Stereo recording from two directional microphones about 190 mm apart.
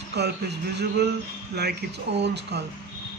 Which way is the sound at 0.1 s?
60° right (ahead or behind).